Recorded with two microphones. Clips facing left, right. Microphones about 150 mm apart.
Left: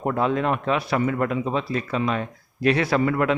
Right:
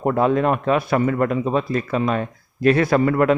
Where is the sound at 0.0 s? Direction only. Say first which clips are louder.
Right 5 dB; 45° right (ahead or behind).